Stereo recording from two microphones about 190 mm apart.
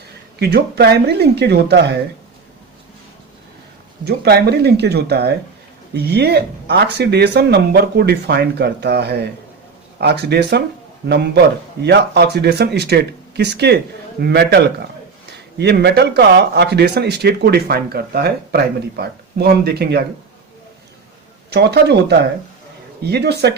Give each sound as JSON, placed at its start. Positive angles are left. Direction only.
{"t": 0.3, "sound": "speech", "side_deg": -60}
{"t": 4.0, "sound": "speech", "side_deg": -55}
{"t": 21.5, "sound": "speech", "side_deg": -60}